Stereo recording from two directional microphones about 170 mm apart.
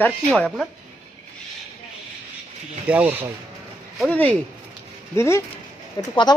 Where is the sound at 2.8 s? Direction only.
10° right (ahead or behind).